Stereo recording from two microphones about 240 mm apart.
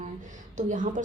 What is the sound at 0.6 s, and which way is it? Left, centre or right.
Speech, right.